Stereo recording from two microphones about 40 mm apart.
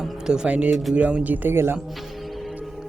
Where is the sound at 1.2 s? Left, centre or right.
Right.